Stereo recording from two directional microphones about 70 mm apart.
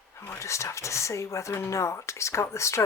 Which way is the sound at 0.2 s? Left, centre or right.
Left.